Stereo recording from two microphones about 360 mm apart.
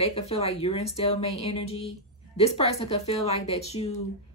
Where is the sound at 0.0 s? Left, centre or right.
Centre.